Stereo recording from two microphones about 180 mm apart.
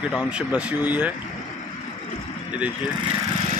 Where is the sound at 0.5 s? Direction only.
5° right (ahead or behind).